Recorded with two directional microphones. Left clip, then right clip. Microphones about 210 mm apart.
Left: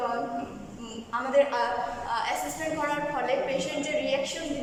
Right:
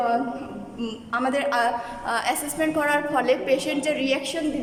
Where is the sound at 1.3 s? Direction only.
55° right (ahead or behind).